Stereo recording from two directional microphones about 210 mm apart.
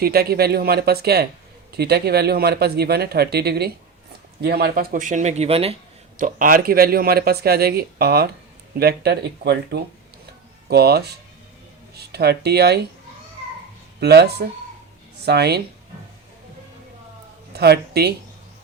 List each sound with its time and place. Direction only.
0.0 s speech: 45° right (ahead or behind); by 5.7 s 30° right (ahead or behind)
6.1 s speech: 40° right (ahead or behind)
14.0 s speech: 50° right (ahead or behind)
17.5 s speech: 50° right (ahead or behind)